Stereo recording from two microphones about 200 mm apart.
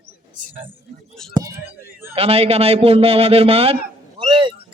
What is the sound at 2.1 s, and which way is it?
A man's voice, 30° right (ahead or behind).